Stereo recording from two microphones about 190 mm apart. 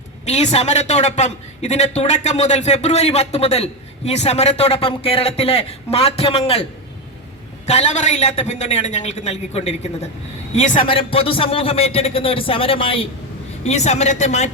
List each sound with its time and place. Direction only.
0.3 s a man's voice: 35° left (ahead or behind)
7.7 s a man's voice: 35° left (ahead or behind)